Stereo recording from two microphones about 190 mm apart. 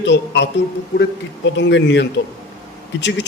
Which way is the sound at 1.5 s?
65° left (ahead or behind).